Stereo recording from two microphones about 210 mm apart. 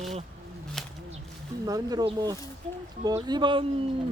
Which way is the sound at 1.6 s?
20° right (ahead or behind).